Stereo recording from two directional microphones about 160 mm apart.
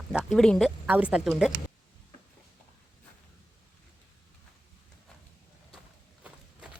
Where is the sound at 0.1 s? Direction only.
5° right (ahead or behind).